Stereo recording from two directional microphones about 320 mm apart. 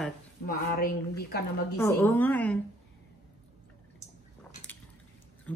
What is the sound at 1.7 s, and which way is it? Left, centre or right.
Speech, centre.